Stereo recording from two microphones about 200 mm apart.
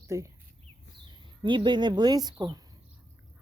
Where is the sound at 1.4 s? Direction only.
25° right (ahead or behind).